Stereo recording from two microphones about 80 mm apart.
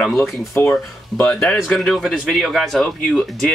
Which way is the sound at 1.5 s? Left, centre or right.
Centre.